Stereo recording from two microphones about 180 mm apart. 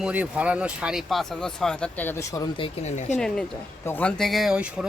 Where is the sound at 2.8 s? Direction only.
40° left (ahead or behind).